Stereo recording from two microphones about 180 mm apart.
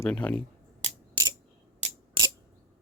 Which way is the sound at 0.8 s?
20° right (ahead or behind).